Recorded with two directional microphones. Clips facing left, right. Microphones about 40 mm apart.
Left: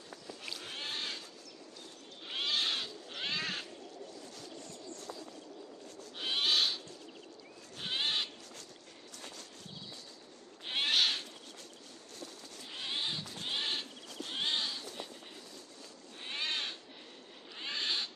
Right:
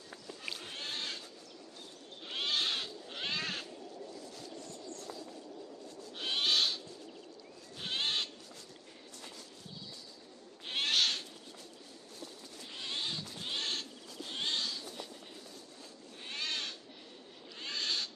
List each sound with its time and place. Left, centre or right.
0.7 s a sound: centre
2.2 s cat: centre
6.1 s owl: centre
7.8 s owl: centre
10.7 s cat: centre
12.7 s owl: centre
14.3 s a sound: centre
16.3 s owl: left